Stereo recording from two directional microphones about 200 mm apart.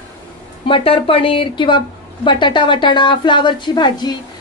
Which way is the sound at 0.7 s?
25° left (ahead or behind).